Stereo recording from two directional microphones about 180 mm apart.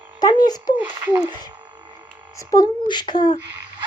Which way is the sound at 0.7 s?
10° right (ahead or behind).